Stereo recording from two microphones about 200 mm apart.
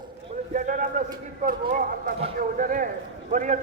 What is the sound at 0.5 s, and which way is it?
A man's voice, 40° right (ahead or behind).